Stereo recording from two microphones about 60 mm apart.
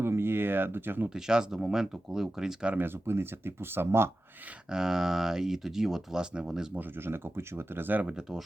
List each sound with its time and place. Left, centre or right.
0.0 s a sound: right
1.1 s speech: centre
2.7 s speech: right
4.7 s speech: centre
6.7 s speech: right